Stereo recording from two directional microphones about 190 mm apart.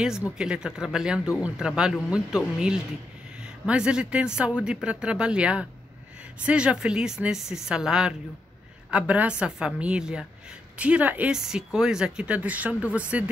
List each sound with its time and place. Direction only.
0.4 s speech: 5° right (ahead or behind)